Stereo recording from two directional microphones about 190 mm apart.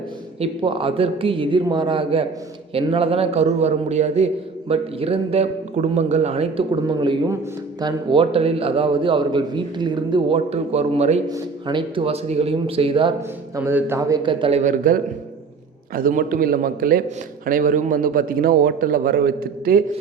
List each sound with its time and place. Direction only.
0.3 s a man's voice: 30° right (ahead or behind)
11.3 s a man's voice: 20° right (ahead or behind)
13.6 s a man's voice: 10° right (ahead or behind)
14.2 s a man's voice: 25° right (ahead or behind); by 19.8 s 50° right (ahead or behind)